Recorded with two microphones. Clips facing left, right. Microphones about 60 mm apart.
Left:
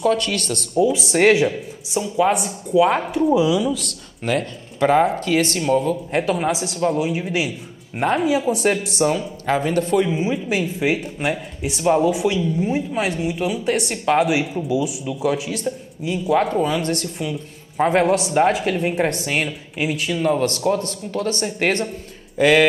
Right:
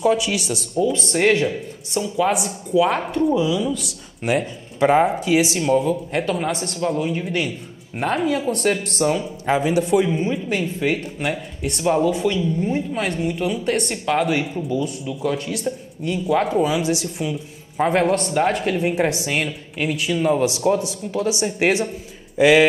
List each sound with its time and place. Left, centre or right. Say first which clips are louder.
0.0 s speech: even; centre
1.3 s speech: left 2 dB; centre
4.2 s speech: right 1 dB; centre
6.1 s speech: left 2 dB; centre
10.1 s speech: left 1 dB; centre